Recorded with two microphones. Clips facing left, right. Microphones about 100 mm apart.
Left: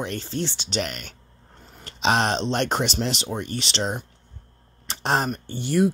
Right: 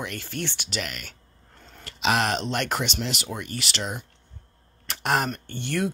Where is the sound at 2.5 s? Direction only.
30° left (ahead or behind).